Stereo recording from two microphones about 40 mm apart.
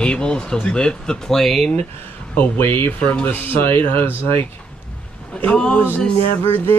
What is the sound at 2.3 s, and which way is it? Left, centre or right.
Speech, left.